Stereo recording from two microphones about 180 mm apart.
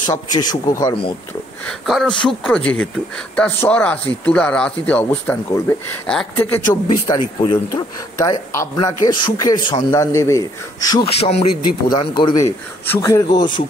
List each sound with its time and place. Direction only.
0.0 s speech: 25° left (ahead or behind)
1.7 s speech: 5° left (ahead or behind); by 11.1 s 20° left (ahead or behind)
11.1 s speech: 35° left (ahead or behind)
12.4 s speech: 15° left (ahead or behind)